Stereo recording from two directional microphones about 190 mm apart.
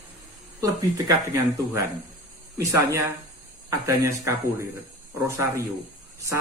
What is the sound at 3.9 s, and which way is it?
A man's voice, 15° right (ahead or behind).